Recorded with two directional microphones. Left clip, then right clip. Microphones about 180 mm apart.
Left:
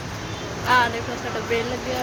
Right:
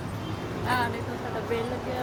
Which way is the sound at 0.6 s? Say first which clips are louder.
Left 9 dB; 30° left (ahead or behind).